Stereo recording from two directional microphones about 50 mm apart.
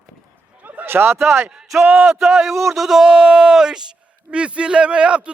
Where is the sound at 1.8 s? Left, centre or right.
Right.